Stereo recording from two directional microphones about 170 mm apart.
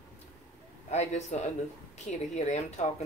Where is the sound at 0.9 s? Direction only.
40° left (ahead or behind).